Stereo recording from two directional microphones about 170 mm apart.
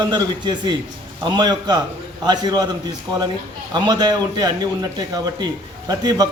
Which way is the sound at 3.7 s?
25° right (ahead or behind).